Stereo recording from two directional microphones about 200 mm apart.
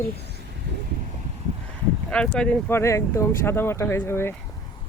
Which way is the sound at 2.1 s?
5° left (ahead or behind).